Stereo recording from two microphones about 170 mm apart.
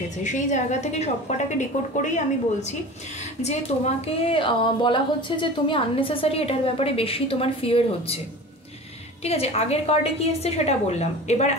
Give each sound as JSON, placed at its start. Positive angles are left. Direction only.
{"t": 0.2, "sound": "a woman's voice", "side_deg": 45}
{"t": 3.4, "sound": "a woman's voice", "side_deg": 35}
{"t": 9.2, "sound": "a woman's voice", "side_deg": 35}